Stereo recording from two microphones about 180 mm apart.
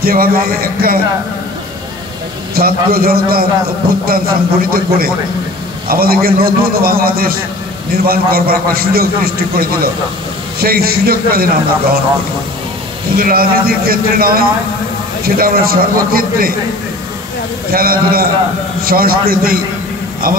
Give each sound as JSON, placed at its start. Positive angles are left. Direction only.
{"t": 0.0, "sound": "a man's voice", "side_deg": -55}
{"t": 2.5, "sound": "a man's voice", "side_deg": -55}
{"t": 13.1, "sound": "a man's voice", "side_deg": -55}
{"t": 17.6, "sound": "a man's voice", "side_deg": -55}